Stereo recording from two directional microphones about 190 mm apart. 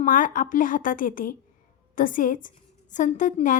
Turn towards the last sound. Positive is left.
turn(degrees=40)  # may be behind; listen again after turning